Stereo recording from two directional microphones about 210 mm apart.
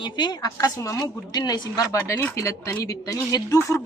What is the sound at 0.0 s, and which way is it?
A woman's voice, 20° left (ahead or behind).